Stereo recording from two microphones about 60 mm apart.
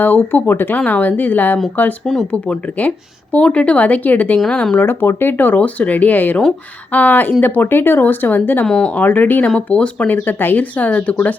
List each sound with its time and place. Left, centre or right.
0.0 s speech: left
4.4 s speech: centre
4.7 s speech: left
8.6 s speech: centre
9.0 s speech: left
10.1 s speech: left